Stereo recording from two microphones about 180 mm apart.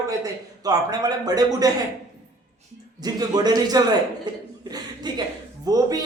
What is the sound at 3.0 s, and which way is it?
Speech, 20° right (ahead or behind).